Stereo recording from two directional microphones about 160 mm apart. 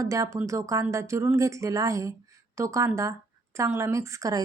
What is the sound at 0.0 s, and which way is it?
A woman's voice, 20° right (ahead or behind).